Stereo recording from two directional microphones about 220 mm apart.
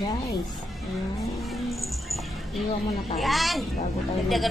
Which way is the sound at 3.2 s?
Centre (ahead or behind).